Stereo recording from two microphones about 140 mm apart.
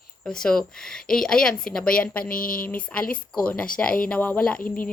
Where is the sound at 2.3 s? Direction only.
90° left.